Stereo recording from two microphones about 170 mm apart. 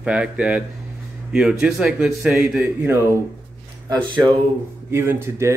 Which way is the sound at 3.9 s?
30° right (ahead or behind).